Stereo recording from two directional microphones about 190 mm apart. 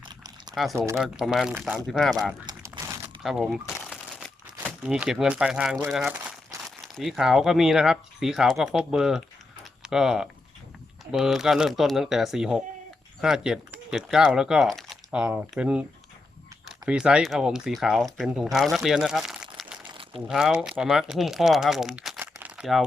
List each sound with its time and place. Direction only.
0.0 s a sound: 20° right (ahead or behind)
0.5 s speech: centre (ahead or behind)
2.5 s crumpling: 15° right (ahead or behind)
3.2 s speech: centre (ahead or behind)